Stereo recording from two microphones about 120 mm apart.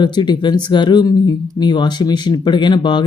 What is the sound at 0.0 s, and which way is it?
Speech, 40° left (ahead or behind).